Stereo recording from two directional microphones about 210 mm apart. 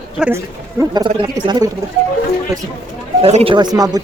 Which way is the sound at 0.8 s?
20° right (ahead or behind).